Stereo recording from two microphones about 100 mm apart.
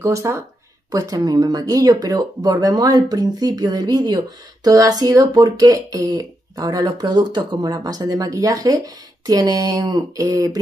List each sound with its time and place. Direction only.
0.0 s speech: 30° right (ahead or behind)